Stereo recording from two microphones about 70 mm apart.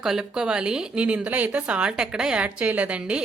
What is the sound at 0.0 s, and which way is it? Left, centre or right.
A woman's voice, centre.